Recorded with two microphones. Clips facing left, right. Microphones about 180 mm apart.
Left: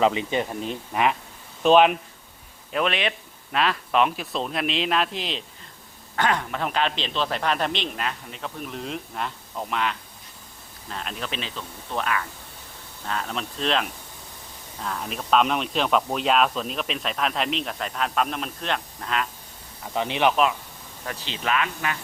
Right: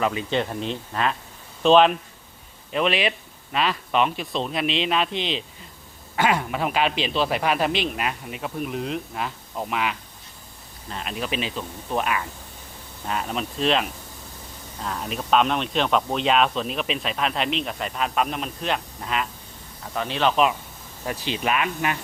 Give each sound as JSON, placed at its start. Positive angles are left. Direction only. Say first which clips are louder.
{"t": 0.0, "sound": "speech", "louder": "left 3 dB", "side_deg": 20}
{"t": 0.3, "sound": "speech", "louder": "right 1 dB", "side_deg": 10}
{"t": 2.7, "sound": "speech", "louder": "right 2 dB", "side_deg": 0}
{"t": 19.9, "sound": "speech", "louder": "left 1 dB", "side_deg": 20}
{"t": 21.0, "sound": "speech", "louder": "right 4 dB", "side_deg": -15}